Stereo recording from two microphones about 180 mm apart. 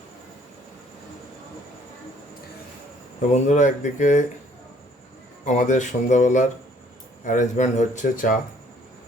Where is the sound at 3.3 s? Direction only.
45° left (ahead or behind).